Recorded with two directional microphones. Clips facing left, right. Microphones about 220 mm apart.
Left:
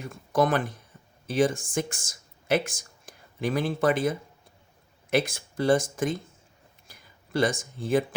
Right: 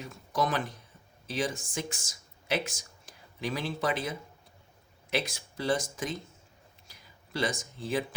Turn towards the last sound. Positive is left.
turn(degrees=50)  # may be behind; listen again after turning